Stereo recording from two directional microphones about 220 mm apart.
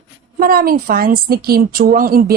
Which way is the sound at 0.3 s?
40° right (ahead or behind).